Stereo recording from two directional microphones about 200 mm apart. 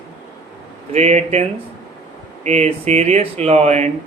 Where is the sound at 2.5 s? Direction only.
35° right (ahead or behind).